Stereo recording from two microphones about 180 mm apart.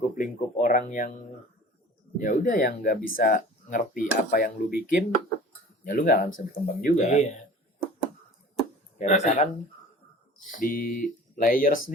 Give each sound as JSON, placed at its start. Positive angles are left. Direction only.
{"t": 0.2, "sound": "speech", "side_deg": 45}
{"t": 2.2, "sound": "speech", "side_deg": 45}
{"t": 9.0, "sound": "speech", "side_deg": 40}
{"t": 10.5, "sound": "speech", "side_deg": 50}